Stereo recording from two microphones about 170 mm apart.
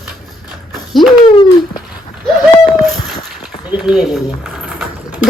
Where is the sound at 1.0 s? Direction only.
35° left (ahead or behind).